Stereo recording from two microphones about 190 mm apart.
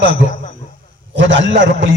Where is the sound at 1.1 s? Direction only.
75° right (ahead or behind).